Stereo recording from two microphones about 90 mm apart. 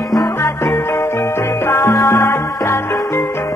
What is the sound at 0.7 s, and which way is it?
Music, 25° left (ahead or behind).